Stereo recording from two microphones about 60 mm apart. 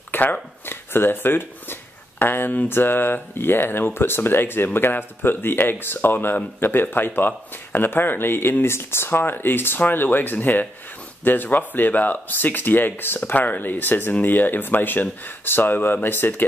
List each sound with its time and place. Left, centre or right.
0.1 s speech: left